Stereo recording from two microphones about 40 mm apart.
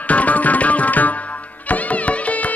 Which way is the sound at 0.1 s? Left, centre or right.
Left.